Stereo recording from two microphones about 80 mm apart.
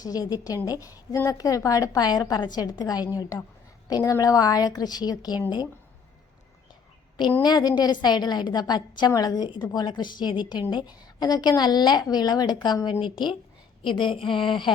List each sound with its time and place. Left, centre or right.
0.0 s a woman's voice: left
7.4 s a woman's voice: left
11.0 s a woman's voice: left
13.8 s a woman's voice: left